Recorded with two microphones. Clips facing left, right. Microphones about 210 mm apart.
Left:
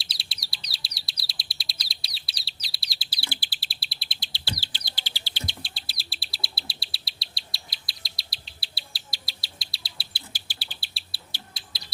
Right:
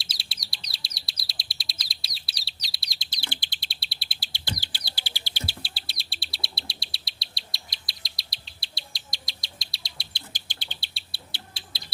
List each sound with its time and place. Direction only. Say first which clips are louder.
0.0 s bird: even; centre (ahead or behind)
1.3 s chirp: even; centre (ahead or behind)
1.8 s bird: even; centre (ahead or behind)
2.7 s chirp: left 2 dB; centre (ahead or behind)
4.3 s bird: right 1 dB; 15° right (ahead or behind); by 11.2 s centre (ahead or behind)
11.7 s bird: right 1 dB; 25° right (ahead or behind)